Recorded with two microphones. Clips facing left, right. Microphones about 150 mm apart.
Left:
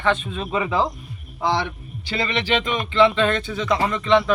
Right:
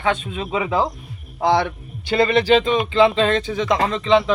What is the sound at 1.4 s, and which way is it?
A man's voice, 55° right (ahead or behind).